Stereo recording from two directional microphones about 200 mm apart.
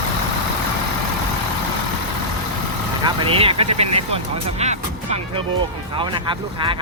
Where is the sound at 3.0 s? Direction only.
30° right (ahead or behind).